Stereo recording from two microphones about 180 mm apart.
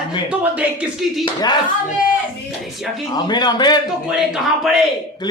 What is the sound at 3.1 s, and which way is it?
Speech, 25° left (ahead or behind).